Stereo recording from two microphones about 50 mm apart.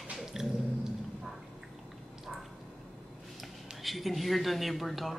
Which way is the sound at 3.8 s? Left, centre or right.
Centre.